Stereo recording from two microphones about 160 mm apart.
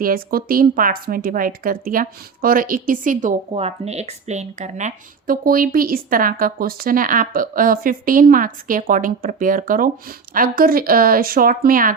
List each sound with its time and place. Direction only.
0.0 s speech: 65° right (ahead or behind)
3.5 s speech: 40° right (ahead or behind); by 11.9 s 60° right (ahead or behind)